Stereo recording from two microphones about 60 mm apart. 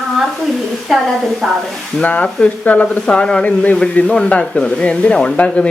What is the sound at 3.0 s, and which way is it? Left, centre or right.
Speech, centre.